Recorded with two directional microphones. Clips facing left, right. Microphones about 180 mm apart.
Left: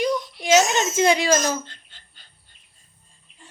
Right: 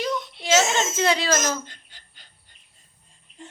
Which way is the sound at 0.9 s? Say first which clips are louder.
Left 5 dB; 15° left (ahead or behind).